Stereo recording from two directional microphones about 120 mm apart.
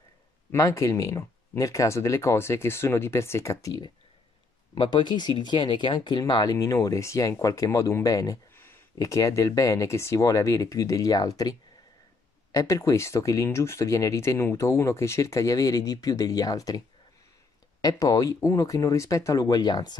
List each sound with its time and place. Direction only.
0.5 s speech: 25° left (ahead or behind)
8.5 s speech: 20° left (ahead or behind)
12.5 s speech: 25° left (ahead or behind)
17.8 s speech: 30° left (ahead or behind)